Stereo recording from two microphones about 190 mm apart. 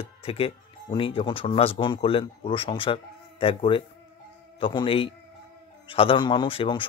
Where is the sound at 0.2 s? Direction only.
30° left (ahead or behind).